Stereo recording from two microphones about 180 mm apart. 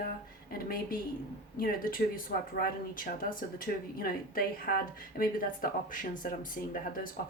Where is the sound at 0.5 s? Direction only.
50° left (ahead or behind).